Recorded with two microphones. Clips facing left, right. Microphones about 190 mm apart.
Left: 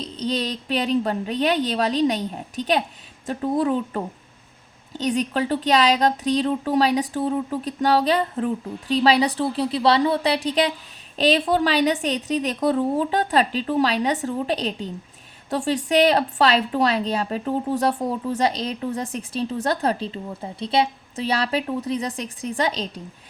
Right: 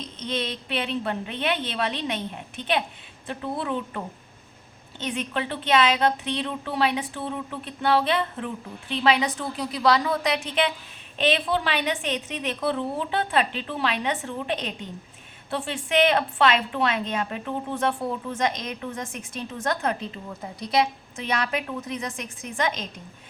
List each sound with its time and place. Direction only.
0.0 s a woman's voice: 35° left (ahead or behind)